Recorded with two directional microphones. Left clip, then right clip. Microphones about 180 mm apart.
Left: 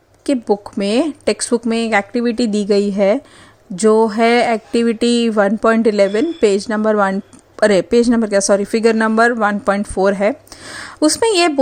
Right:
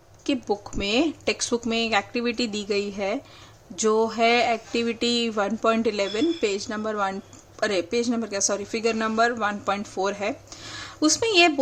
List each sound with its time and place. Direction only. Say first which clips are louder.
0.3 s speech: left 9 dB; 35° left (ahead or behind)